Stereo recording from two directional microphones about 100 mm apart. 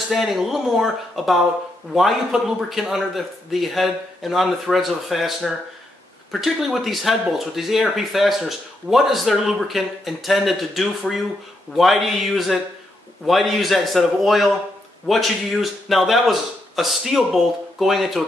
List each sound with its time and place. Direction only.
0.1 s speech: centre (ahead or behind)